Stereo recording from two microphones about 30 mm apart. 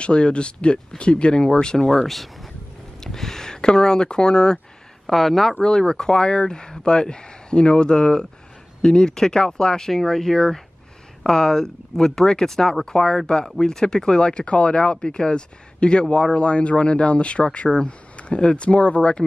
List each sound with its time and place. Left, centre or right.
0.0 s speech: left
1.8 s speech: centre
2.0 s speech: centre
3.0 s speech: centre
5.0 s speech: centre
5.6 s speech: left
15.0 s speech: left